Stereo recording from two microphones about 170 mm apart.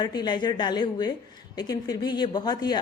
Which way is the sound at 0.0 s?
25° left (ahead or behind).